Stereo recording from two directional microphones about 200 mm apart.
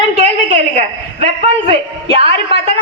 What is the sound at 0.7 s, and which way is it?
Speech, 35° right (ahead or behind).